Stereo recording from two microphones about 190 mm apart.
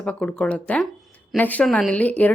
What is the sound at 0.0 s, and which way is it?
Speech, 5° left (ahead or behind).